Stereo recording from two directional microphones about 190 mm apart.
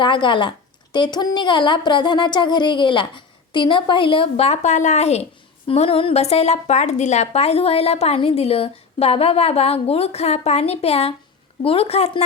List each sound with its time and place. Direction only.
0.0 s a woman's voice: 25° left (ahead or behind)